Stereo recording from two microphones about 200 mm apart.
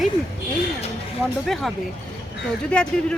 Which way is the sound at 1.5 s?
Centre (ahead or behind).